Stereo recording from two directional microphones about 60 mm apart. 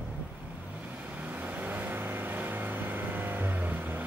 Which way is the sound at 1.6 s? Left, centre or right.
Right.